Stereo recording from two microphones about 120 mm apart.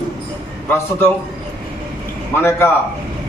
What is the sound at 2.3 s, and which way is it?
Speech, 20° left (ahead or behind).